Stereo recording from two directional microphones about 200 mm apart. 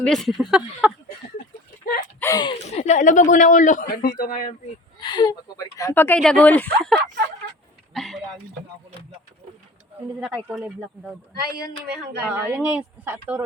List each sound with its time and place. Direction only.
0.0 s speech: centre (ahead or behind)
1.8 s a sound: 45° left (ahead or behind)
2.2 s speech: 20° left (ahead or behind)
2.6 s a woman's voice: 35° left (ahead or behind)
4.9 s speech: 20° left (ahead or behind); by 7.0 s 5° left (ahead or behind)
7.9 s a sound: centre (ahead or behind)
10.2 s speech: 5° right (ahead or behind)
11.3 s speech: 50° right (ahead or behind)
12.2 s speech: 5° right (ahead or behind)